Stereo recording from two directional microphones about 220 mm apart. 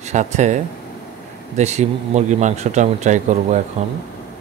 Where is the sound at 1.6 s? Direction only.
30° right (ahead or behind).